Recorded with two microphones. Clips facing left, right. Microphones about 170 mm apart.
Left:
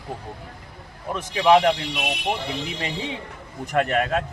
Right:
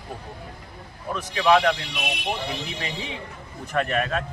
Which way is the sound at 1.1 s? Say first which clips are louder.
Left 2 dB; 20° left (ahead or behind).